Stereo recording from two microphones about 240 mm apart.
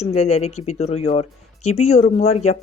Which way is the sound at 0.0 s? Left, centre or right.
Left.